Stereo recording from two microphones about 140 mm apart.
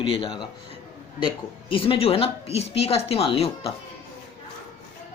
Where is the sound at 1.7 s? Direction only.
40° left (ahead or behind).